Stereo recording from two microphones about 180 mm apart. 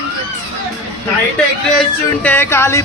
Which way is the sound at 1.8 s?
10° left (ahead or behind).